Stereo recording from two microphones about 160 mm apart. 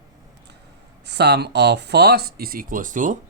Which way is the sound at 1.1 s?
90° right.